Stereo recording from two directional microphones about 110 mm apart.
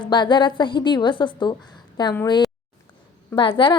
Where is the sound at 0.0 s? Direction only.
45° left (ahead or behind).